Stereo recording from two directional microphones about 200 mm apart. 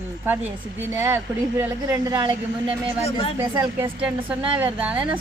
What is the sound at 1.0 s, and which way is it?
Speech, 10° right (ahead or behind).